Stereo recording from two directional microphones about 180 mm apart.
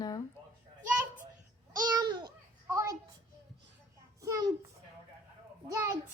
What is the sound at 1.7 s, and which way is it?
Babbling, 20° right (ahead or behind).